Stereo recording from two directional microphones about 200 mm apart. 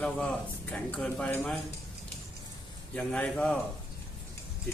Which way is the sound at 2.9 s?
5° left (ahead or behind).